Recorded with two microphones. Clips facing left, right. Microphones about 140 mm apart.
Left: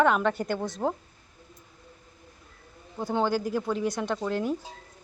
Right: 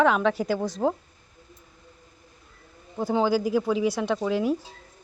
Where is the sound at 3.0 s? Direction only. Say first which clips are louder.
Right 4 dB; 5° right (ahead or behind).